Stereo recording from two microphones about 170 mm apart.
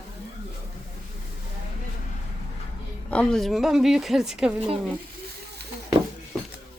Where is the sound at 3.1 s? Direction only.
5° left (ahead or behind).